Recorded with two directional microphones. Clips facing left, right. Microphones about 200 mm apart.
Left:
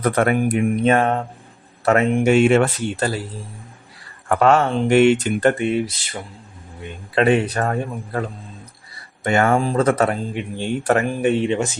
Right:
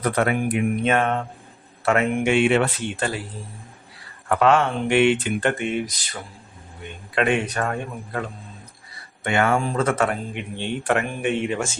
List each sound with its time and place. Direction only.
0.0 s speech: 45° left (ahead or behind)
4.3 s speech: 45° left (ahead or behind)
7.2 s speech: 35° left (ahead or behind)
9.2 s speech: 40° left (ahead or behind)
11.4 s speech: 20° left (ahead or behind)